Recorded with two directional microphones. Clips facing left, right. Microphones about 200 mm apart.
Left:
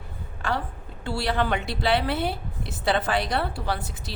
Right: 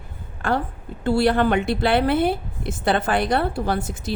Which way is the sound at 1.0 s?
50° right (ahead or behind).